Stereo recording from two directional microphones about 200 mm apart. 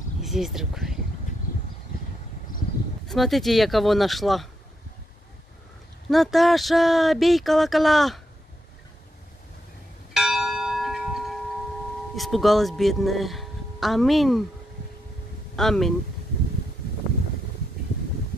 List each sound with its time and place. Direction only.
0.2 s speech: centre (ahead or behind)
3.1 s speech: centre (ahead or behind)
6.0 s speech: centre (ahead or behind)
10.1 s church bell: centre (ahead or behind)
12.2 s speech: centre (ahead or behind)
15.5 s speech: centre (ahead or behind)